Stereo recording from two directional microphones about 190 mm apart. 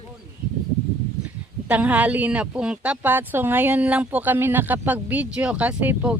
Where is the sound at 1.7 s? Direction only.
5° right (ahead or behind).